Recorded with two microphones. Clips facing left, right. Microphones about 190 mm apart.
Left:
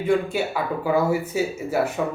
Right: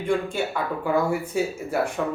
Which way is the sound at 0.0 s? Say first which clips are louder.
Left 3 dB; 5° left (ahead or behind).